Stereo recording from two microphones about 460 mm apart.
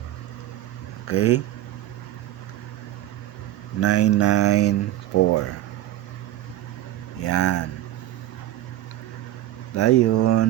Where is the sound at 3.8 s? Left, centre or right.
Left.